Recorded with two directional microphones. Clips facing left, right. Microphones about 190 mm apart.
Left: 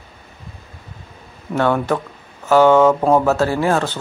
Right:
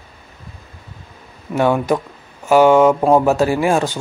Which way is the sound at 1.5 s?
15° right (ahead or behind).